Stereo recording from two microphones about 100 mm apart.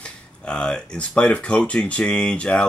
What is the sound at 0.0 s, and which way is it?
Speech, 10° left (ahead or behind).